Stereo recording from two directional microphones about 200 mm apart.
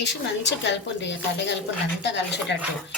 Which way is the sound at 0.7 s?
60° left (ahead or behind).